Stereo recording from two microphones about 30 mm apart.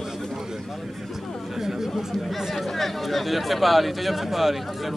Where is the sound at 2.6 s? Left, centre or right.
Centre.